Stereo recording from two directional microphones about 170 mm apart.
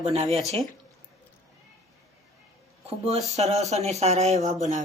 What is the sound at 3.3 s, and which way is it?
A woman's voice, 40° right (ahead or behind).